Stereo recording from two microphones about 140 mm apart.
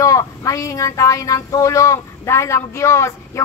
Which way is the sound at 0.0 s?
25° left (ahead or behind).